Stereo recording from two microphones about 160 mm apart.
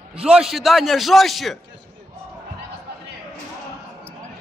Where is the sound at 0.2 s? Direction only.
5° right (ahead or behind).